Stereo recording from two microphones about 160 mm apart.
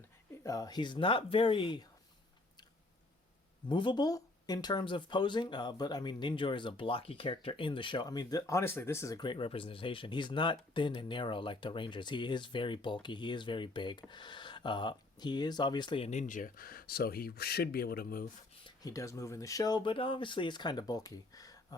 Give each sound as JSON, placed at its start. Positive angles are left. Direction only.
{"t": 0.4, "sound": "speech", "side_deg": 20}
{"t": 3.7, "sound": "speech", "side_deg": 30}
{"t": 16.0, "sound": "speech", "side_deg": 50}
{"t": 18.6, "sound": "speech", "side_deg": 25}